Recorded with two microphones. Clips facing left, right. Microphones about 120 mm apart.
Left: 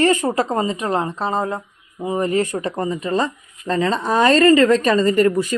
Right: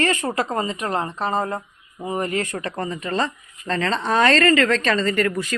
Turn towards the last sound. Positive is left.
turn(degrees=15)  # may be behind; listen again after turning